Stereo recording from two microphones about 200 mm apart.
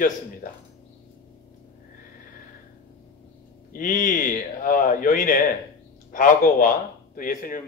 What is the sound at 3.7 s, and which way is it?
A man's voice, 40° left (ahead or behind).